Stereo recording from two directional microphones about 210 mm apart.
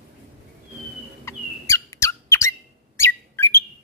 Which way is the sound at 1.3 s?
15° left (ahead or behind).